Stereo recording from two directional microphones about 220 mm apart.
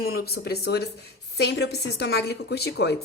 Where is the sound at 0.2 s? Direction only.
45° left (ahead or behind).